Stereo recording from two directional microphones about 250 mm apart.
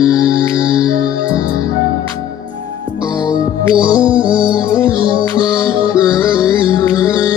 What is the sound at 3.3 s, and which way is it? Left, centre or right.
Music, centre.